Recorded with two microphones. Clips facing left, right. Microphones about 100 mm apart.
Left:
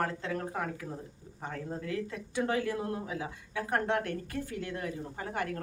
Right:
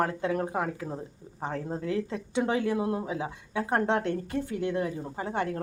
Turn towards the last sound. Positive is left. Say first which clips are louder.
# right 5 dB
turn(degrees=-25)  # may be behind; listen again after turning